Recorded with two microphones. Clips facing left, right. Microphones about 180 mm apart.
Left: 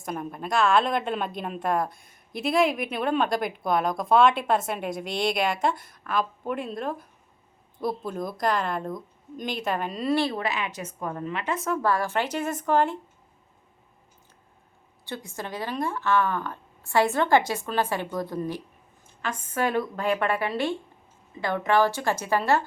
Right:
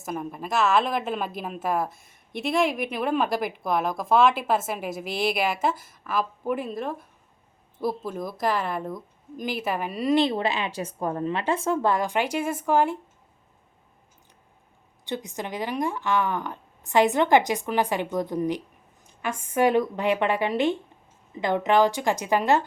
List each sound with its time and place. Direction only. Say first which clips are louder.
0.0 s a woman's voice: right 1 dB; centre (ahead or behind)
15.0 s speech: right 4 dB; 20° right (ahead or behind)